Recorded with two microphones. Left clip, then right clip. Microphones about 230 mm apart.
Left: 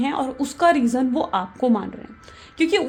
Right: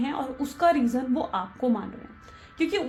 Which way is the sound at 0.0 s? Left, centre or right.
Left.